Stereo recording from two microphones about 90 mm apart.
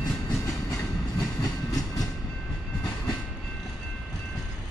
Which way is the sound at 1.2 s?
40° left (ahead or behind).